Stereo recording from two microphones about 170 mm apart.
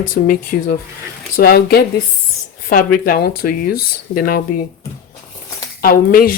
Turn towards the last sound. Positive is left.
turn(degrees=60)  # may be behind; listen again after turning